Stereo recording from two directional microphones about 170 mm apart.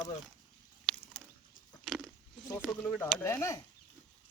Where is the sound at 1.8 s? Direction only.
Centre (ahead or behind).